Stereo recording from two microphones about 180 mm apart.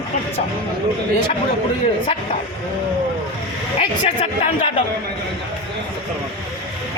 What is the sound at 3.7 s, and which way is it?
Speech, 40° left (ahead or behind).